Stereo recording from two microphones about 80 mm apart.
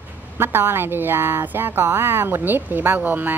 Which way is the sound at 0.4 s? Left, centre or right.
Right.